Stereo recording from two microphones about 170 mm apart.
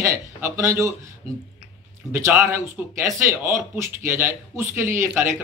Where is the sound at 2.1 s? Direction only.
15° right (ahead or behind).